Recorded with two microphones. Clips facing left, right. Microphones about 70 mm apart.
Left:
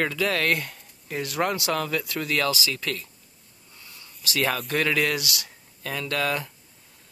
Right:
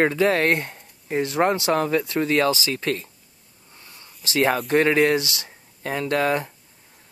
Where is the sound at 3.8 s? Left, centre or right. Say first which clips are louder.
Right 1 dB; right.